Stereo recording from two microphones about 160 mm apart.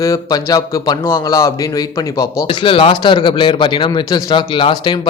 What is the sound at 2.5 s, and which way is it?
A man's voice, 35° left (ahead or behind).